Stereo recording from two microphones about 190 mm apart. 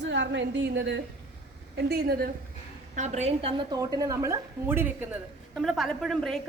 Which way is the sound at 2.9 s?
40° right (ahead or behind).